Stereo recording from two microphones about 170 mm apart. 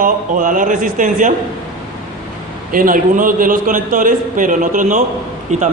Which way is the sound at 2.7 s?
55° right (ahead or behind).